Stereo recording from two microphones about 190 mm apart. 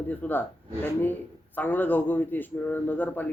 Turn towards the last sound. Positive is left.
turn(degrees=10)  # may be behind; listen again after turning